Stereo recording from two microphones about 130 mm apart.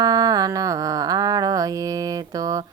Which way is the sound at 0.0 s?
30° right (ahead or behind).